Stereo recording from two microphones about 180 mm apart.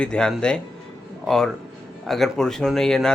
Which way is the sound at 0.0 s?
5° left (ahead or behind).